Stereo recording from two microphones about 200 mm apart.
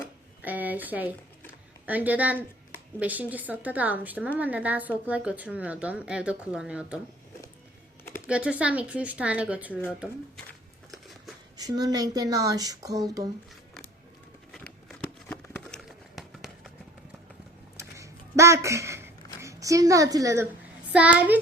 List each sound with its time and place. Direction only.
0.4 s a sound: 10° right (ahead or behind)
3.0 s a woman's voice: 10° right (ahead or behind)
8.3 s a woman's voice: 5° right (ahead or behind)
11.5 s speech: 20° right (ahead or behind)
14.5 s crumpling: 5° left (ahead or behind)
17.7 s a sound: 15° right (ahead or behind)
20.9 s a woman's voice: 5° right (ahead or behind)